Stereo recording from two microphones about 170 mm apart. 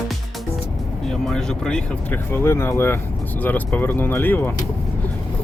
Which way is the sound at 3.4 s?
10° left (ahead or behind).